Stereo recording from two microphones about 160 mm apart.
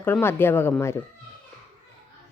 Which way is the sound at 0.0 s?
15° left (ahead or behind).